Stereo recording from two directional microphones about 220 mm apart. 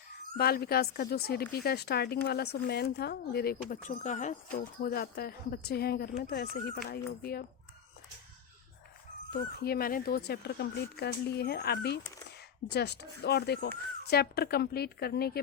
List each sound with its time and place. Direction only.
0.3 s speech: 45° left (ahead or behind)
9.3 s speech: 45° left (ahead or behind)